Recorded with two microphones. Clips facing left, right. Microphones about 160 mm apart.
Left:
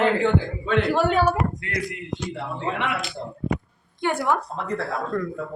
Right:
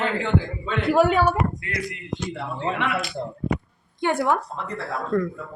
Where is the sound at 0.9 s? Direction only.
5° right (ahead or behind).